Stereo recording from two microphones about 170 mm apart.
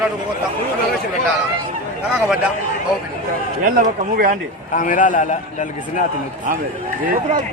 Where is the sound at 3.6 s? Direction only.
55° right (ahead or behind).